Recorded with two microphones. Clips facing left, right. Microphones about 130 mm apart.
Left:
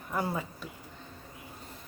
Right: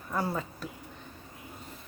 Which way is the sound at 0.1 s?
10° left (ahead or behind).